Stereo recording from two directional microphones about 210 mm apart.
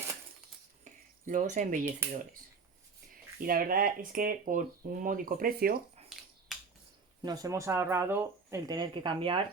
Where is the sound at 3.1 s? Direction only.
40° right (ahead or behind).